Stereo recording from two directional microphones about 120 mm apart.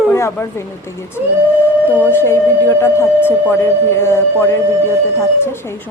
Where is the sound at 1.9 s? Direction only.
15° left (ahead or behind).